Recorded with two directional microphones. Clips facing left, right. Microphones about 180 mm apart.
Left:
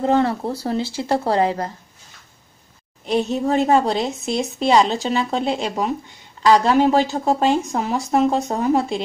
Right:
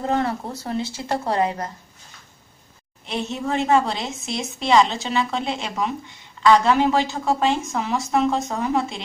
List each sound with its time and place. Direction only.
0.0 s a woman's voice: 30° left (ahead or behind)
3.1 s a woman's voice: 40° left (ahead or behind)